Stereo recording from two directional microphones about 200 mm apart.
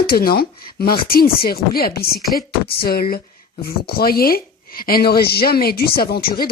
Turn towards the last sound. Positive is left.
turn(degrees=50)  # may be behind; listen again after turning